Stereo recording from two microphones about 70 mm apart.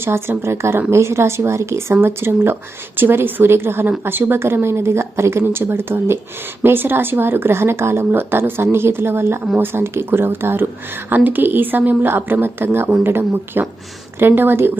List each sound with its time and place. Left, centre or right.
0.0 s a woman's voice: right